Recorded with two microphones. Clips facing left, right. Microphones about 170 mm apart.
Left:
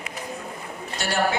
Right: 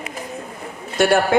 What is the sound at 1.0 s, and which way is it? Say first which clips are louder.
Speech: right 9 dB; 55° right (ahead or behind).